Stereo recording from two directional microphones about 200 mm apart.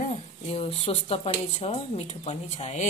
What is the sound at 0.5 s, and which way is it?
Speech, 30° left (ahead or behind).